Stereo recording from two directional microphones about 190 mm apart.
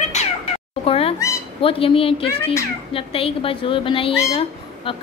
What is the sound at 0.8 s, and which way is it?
Speech, 30° left (ahead or behind).